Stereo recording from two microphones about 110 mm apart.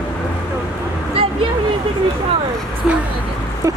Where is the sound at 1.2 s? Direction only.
60° right (ahead or behind).